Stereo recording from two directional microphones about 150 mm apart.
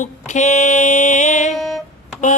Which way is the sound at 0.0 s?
50° left (ahead or behind).